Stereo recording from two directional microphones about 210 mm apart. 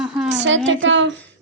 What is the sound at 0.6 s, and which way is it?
Speech, 60° right (ahead or behind).